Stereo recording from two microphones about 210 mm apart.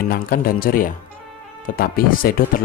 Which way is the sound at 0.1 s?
45° left (ahead or behind).